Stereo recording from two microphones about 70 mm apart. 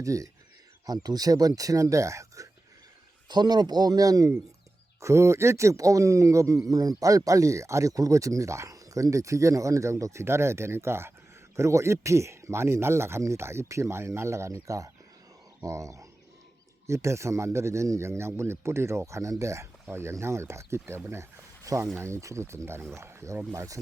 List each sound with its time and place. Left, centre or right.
0.0 s a man's voice: right
0.9 s speech: right
3.2 s speech: right
4.9 s a man's voice: right
6.7 s a man's voice: right
21.6 s speech: right
21.9 s a man's voice: right